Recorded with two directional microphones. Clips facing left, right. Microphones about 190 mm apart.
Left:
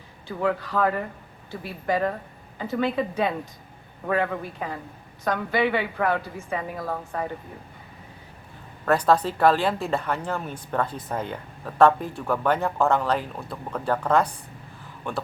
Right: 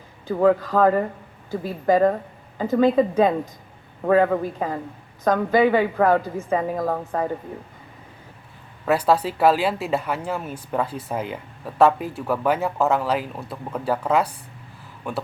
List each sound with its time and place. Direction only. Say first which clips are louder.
0.3 s a woman's voice: right 8 dB; 45° right (ahead or behind)
8.8 s speech: right 1 dB; 10° right (ahead or behind)